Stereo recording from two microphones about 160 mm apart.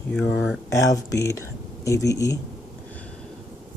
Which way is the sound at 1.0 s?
20° left (ahead or behind).